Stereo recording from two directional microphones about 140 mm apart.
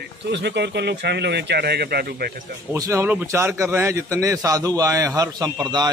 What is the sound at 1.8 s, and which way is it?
Speech, 90° right.